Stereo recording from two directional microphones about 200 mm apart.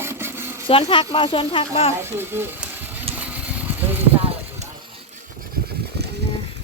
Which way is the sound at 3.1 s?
5° right (ahead or behind).